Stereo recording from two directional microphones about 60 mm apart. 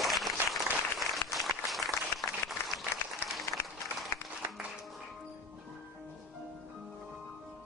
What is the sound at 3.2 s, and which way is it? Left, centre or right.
Applause, left.